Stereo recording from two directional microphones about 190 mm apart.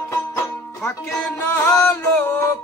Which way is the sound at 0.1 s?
15° left (ahead or behind).